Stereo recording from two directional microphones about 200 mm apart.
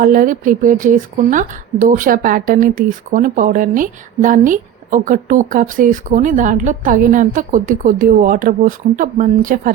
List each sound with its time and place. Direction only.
0.0 s a woman's voice: 45° right (ahead or behind)